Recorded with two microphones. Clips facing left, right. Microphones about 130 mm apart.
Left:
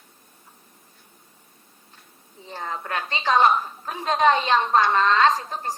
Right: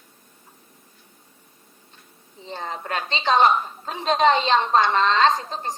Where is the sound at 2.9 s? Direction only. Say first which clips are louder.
Right 2 dB; 25° right (ahead or behind).